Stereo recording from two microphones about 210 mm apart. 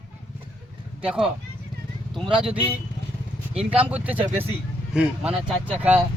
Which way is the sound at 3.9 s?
5° right (ahead or behind).